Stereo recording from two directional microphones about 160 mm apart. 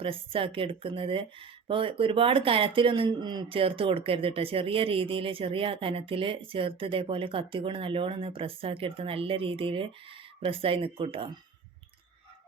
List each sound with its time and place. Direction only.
0.0 s speech: 35° right (ahead or behind)